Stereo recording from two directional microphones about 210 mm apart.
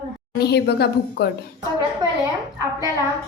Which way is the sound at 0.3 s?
50° left (ahead or behind).